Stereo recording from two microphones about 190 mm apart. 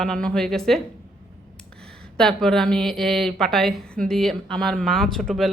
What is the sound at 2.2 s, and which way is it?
Speech, 5° left (ahead or behind).